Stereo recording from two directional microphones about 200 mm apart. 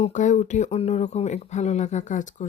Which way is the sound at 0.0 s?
40° left (ahead or behind).